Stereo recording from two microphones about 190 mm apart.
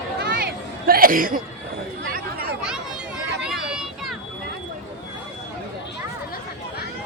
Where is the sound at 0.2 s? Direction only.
55° right (ahead or behind).